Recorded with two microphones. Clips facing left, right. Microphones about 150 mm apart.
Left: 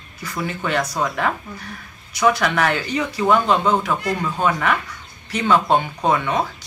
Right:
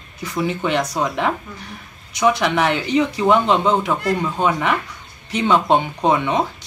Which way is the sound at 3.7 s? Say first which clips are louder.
Right 2 dB; centre (ahead or behind).